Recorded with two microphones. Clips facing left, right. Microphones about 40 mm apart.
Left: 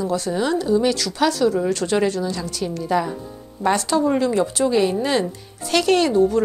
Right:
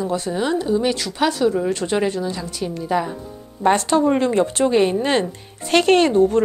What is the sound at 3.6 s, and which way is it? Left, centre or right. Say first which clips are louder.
A woman's voice: right 3 dB; right.